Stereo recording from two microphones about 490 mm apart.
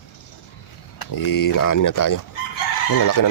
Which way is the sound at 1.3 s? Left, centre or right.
Left.